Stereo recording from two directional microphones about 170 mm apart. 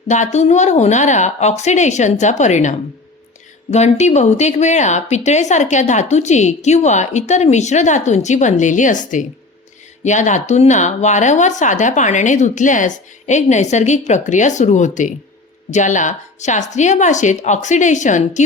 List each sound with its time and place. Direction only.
0.1 s a woman's voice: 45° left (ahead or behind)